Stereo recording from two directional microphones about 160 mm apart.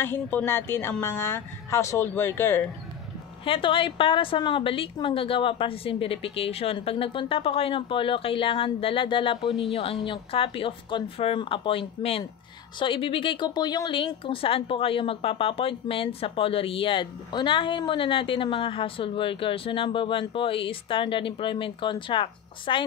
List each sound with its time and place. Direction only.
0.0 s a woman's voice: 10° left (ahead or behind)
3.4 s a woman's voice: 35° left (ahead or behind)